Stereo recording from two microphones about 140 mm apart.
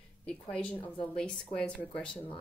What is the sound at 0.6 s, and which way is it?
Speech, 35° left (ahead or behind).